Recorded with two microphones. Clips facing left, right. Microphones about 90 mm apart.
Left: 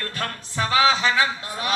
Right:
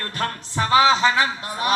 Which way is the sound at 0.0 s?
25° right (ahead or behind).